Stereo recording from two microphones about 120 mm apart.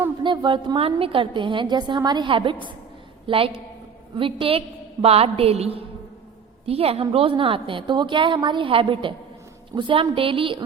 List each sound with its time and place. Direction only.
0.2 s a woman's voice: 40° right (ahead or behind)